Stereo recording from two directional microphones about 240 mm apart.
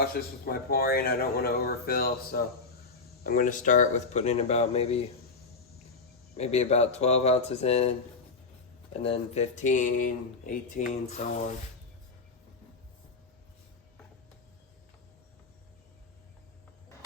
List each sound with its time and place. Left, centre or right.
0.0 s speech: left
6.3 s speech: left